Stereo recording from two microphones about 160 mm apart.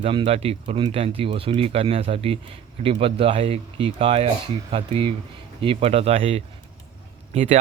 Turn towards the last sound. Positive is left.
turn(degrees=-40)  # may be behind; listen again after turning